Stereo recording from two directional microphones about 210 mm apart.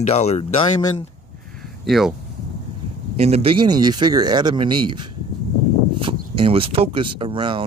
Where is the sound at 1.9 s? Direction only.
Centre (ahead or behind).